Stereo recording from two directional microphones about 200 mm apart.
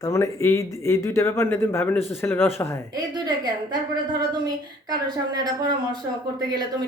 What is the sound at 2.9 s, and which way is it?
Speech, 20° right (ahead or behind).